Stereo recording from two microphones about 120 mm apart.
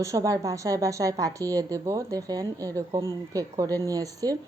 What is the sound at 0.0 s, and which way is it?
Speech, 25° right (ahead or behind).